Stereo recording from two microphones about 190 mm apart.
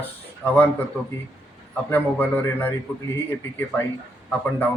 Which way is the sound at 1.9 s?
10° left (ahead or behind).